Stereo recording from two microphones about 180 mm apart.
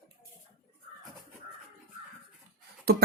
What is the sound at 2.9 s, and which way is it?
Speech, 60° right (ahead or behind).